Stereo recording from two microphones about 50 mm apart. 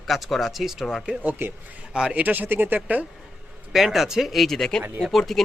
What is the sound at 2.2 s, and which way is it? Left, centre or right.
Speech, right.